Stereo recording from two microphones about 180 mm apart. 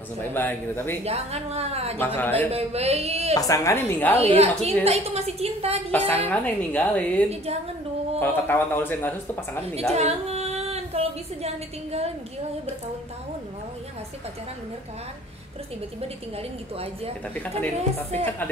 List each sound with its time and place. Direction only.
0.2 s speech: 10° left (ahead or behind)
1.0 s a woman's voice: 35° right (ahead or behind)
2.0 s speech: 10° left (ahead or behind)
2.5 s a woman's voice: 35° right (ahead or behind)
3.3 s speech: 20° left (ahead or behind)
4.2 s a woman's voice: 35° right (ahead or behind)
5.9 s speech: 10° left (ahead or behind)
9.9 s a sound: 35° right (ahead or behind)